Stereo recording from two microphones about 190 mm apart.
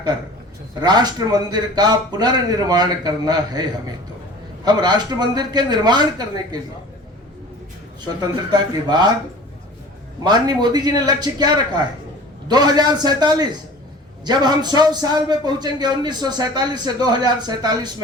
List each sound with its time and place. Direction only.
0.8 s a man's voice: 20° right (ahead or behind)
8.0 s a man's voice: 20° right (ahead or behind)
10.2 s a man's voice: 20° right (ahead or behind)